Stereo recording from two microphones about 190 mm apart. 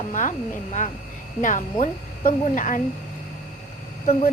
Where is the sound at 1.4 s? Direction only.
40° left (ahead or behind).